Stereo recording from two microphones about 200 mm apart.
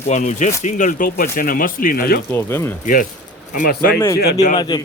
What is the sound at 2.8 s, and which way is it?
Speech, 45° left (ahead or behind).